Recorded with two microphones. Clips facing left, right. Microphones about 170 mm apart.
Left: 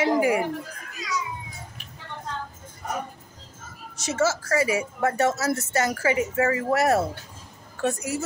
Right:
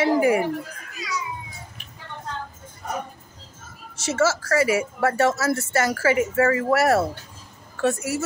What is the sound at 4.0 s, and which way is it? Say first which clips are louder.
A woman's voice: right 2 dB; 15° left (ahead or behind).